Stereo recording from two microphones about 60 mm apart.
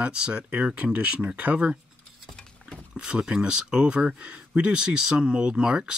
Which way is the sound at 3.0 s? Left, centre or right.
Centre.